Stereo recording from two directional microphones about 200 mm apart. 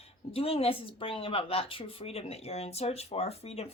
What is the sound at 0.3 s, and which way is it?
A woman's voice, 30° left (ahead or behind).